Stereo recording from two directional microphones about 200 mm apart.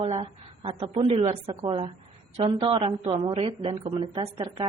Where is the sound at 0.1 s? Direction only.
25° right (ahead or behind).